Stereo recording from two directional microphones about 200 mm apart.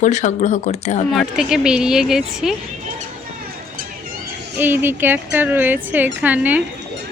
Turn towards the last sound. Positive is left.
turn(degrees=-10)  # may be behind; listen again after turning